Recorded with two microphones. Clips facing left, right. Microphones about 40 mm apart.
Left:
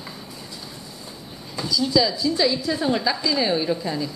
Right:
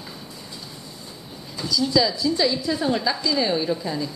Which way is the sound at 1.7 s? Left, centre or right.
Centre.